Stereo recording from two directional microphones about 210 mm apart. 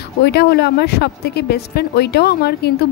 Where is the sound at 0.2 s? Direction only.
50° left (ahead or behind).